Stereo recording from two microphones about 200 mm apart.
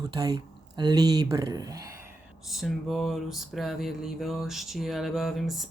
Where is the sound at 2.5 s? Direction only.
Centre (ahead or behind).